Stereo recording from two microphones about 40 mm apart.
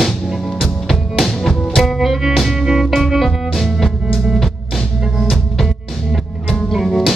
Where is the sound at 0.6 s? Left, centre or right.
Centre.